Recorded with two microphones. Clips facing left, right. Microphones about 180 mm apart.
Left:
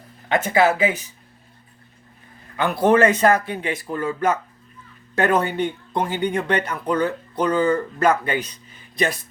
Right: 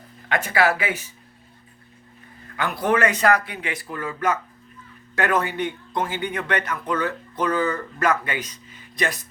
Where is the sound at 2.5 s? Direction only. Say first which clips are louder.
Left 5 dB; 25° left (ahead or behind).